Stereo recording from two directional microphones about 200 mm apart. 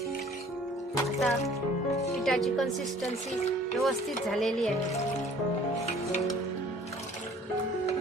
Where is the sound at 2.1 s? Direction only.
Centre (ahead or behind).